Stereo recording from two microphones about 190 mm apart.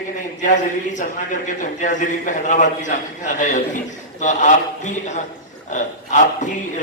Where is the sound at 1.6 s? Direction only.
40° left (ahead or behind).